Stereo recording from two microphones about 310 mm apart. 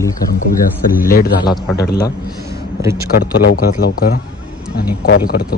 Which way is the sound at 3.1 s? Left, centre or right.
Left.